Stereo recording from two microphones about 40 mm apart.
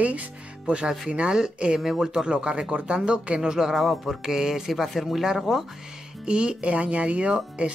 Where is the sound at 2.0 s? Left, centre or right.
Right.